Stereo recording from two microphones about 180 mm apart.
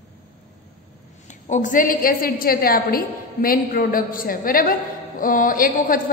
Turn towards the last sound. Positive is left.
turn(degrees=50)  # may be behind; listen again after turning